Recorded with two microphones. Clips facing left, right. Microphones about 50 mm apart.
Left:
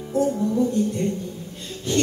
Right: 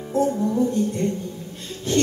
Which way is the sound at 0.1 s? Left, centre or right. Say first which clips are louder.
Right 1 dB; right.